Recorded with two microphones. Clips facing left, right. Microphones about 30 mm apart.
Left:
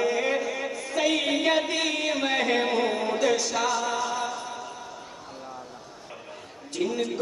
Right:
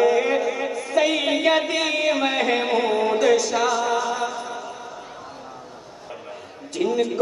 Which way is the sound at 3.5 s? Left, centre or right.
Right.